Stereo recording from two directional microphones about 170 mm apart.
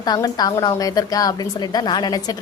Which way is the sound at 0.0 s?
25° left (ahead or behind).